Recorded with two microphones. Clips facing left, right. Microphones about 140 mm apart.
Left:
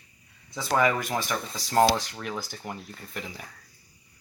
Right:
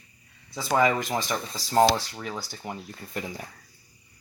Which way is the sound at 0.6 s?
15° right (ahead or behind).